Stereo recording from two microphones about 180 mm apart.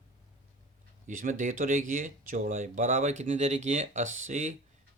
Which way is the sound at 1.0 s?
45° right (ahead or behind).